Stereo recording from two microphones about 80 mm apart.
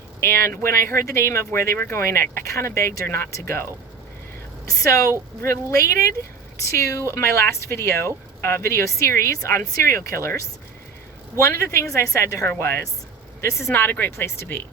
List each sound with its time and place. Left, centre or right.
0.2 s a woman's voice: left
6.6 s speech: left
13.7 s speech: left